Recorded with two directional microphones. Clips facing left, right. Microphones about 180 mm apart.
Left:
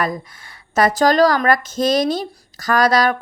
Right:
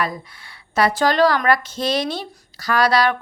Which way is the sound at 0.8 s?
40° left (ahead or behind).